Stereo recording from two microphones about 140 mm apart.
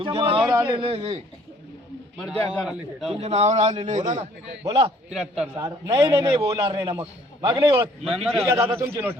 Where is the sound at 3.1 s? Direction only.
50° right (ahead or behind).